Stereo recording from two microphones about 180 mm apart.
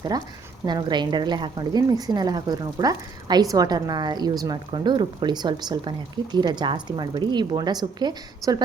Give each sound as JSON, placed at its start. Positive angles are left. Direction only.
{"t": 0.1, "sound": "a woman's voice", "side_deg": -20}